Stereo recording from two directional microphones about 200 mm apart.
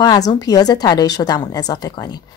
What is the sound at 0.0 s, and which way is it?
A woman's voice, 20° left (ahead or behind).